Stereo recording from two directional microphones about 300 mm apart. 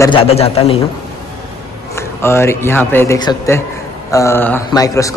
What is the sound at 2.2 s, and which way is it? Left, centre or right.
Speech, centre.